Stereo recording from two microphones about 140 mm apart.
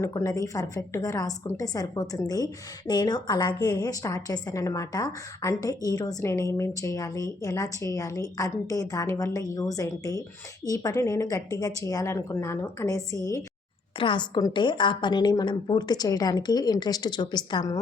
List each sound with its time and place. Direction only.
0.0 s a woman's voice: 25° left (ahead or behind)
14.0 s a woman's voice: 35° left (ahead or behind)